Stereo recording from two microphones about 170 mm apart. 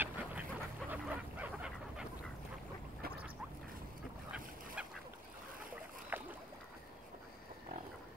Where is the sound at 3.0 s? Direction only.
65° right (ahead or behind).